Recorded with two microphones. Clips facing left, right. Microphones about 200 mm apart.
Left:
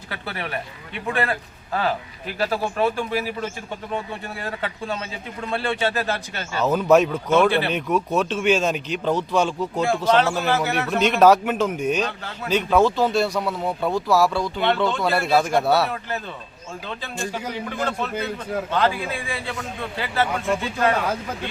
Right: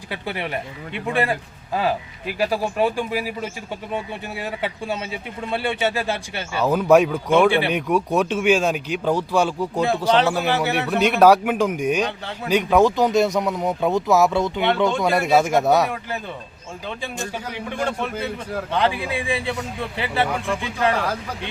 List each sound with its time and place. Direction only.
0.1 s a man's voice: 15° right (ahead or behind)
17.7 s a man's voice: 15° right (ahead or behind)